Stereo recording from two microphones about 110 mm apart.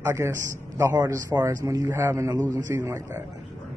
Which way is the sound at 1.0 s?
35° right (ahead or behind).